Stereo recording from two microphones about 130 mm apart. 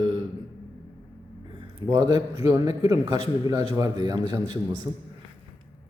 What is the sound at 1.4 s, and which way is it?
A man's voice, 35° right (ahead or behind).